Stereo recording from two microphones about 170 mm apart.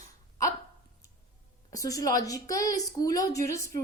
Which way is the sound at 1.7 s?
20° left (ahead or behind).